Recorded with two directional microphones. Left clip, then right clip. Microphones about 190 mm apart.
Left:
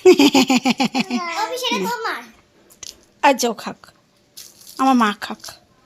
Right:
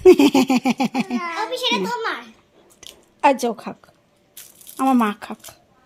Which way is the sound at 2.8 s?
5° right (ahead or behind).